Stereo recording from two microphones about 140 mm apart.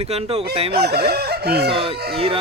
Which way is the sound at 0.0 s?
45° right (ahead or behind).